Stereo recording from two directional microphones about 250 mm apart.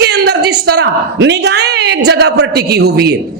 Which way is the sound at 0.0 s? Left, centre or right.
Right.